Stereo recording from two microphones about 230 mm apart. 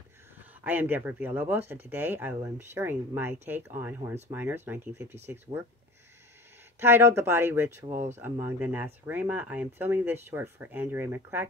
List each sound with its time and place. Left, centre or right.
0.4 s speech: centre
6.8 s speech: centre
7.9 s speech: right
8.2 s speech: centre